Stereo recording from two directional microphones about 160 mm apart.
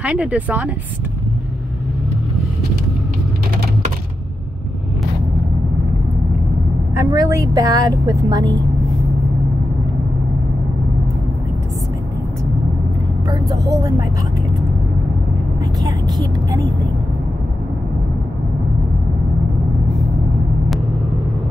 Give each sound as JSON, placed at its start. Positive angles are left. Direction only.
{"t": 0.0, "sound": "speech", "side_deg": -5}
{"t": 7.0, "sound": "speech", "side_deg": -20}
{"t": 13.3, "sound": "speech", "side_deg": -25}
{"t": 15.8, "sound": "speech", "side_deg": -25}